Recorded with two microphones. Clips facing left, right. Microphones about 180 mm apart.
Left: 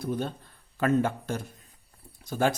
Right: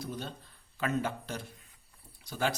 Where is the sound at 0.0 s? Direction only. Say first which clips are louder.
Left 8 dB; 55° left (ahead or behind).